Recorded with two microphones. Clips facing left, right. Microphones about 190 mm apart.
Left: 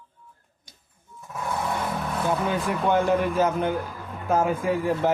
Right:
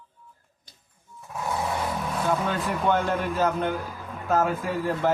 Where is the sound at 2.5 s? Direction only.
10° left (ahead or behind).